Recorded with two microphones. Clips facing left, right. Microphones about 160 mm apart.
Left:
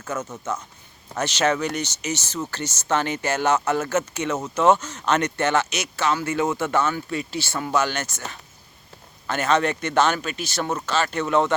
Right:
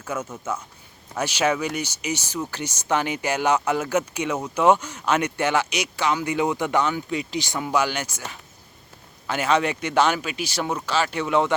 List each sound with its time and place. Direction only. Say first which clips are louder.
0.0 s speech: even; 10° right (ahead or behind)